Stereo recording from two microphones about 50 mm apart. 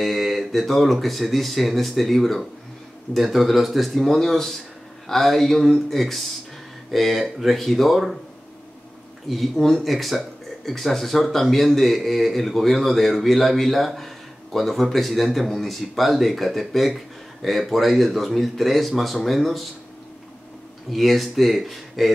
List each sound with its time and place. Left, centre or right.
0.0 s speech: centre
9.3 s speech: centre
20.9 s speech: centre